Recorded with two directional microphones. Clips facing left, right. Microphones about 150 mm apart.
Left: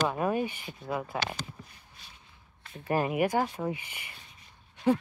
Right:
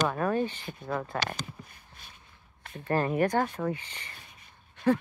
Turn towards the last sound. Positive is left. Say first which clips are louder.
# even
turn(degrees=15)  # may be behind; listen again after turning